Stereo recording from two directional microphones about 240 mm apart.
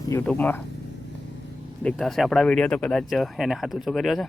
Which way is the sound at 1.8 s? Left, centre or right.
Centre.